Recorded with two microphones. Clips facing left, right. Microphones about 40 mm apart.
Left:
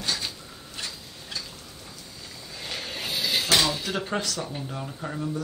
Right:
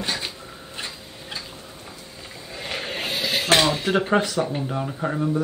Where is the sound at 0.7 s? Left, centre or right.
Right.